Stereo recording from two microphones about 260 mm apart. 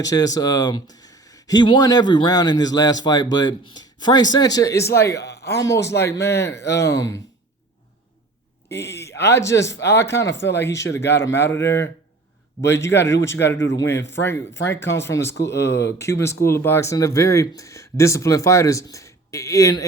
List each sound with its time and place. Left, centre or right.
0.0 s speech: centre
5.2 s speech: left
5.5 s speech: centre
8.7 s a sound: centre
9.2 s speech: centre